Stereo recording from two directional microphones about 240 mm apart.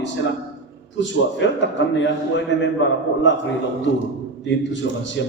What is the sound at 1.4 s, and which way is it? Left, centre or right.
A man's voice, left.